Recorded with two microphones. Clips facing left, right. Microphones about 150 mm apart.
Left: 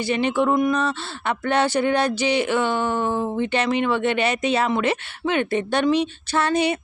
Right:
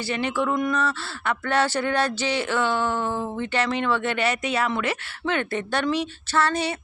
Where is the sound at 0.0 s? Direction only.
20° left (ahead or behind).